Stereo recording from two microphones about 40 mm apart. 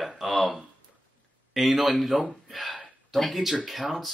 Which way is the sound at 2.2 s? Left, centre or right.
Centre.